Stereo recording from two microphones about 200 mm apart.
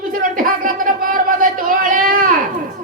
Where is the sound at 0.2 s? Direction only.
45° right (ahead or behind).